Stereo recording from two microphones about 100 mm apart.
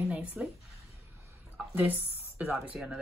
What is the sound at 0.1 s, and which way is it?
Speech, 15° right (ahead or behind).